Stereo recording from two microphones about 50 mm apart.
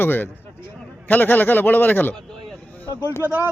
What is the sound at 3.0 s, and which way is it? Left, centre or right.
Speech, left.